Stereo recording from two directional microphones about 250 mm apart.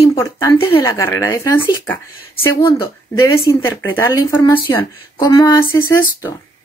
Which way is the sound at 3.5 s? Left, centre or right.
Centre.